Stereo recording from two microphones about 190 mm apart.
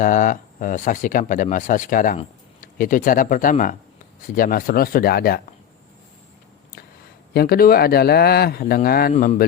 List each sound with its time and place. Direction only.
0.0 s speech: 45° left (ahead or behind)
7.3 s speech: 50° left (ahead or behind)